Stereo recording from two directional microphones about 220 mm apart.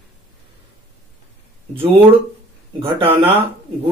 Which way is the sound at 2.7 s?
25° right (ahead or behind).